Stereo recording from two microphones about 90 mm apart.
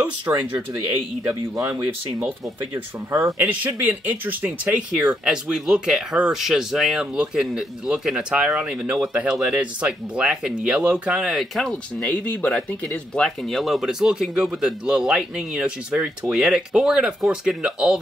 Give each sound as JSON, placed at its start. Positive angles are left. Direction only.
{"t": 0.3, "sound": "speech", "side_deg": -20}
{"t": 2.7, "sound": "speech", "side_deg": -30}
{"t": 3.3, "sound": "speech", "side_deg": -15}
{"t": 11.7, "sound": "speech", "side_deg": 15}